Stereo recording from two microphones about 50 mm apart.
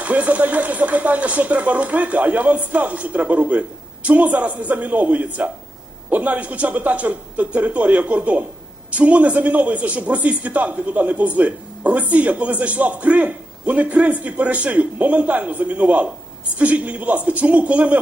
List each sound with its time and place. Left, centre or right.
0.0 s a man's voice: right